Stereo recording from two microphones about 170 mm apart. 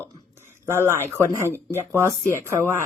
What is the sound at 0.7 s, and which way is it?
Speech, 15° right (ahead or behind).